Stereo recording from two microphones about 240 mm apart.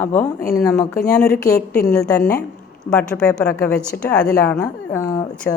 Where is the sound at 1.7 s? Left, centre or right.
Left.